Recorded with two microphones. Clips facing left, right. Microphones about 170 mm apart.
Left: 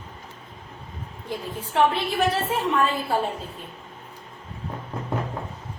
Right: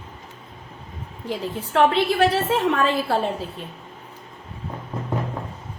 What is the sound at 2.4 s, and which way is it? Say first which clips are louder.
Speech: right 3 dB; 90° right.